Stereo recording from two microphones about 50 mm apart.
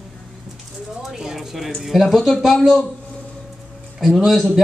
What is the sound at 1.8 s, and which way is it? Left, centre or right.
Speech, centre.